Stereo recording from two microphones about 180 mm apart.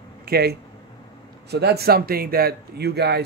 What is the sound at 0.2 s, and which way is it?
Speech, 60° right (ahead or behind).